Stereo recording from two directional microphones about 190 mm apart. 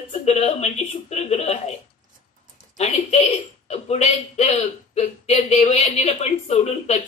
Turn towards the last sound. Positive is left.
turn(degrees=35)  # may be behind; listen again after turning